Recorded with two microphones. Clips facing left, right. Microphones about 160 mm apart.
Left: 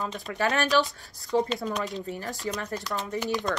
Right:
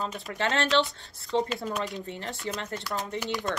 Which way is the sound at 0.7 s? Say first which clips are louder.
Even; 25° right (ahead or behind).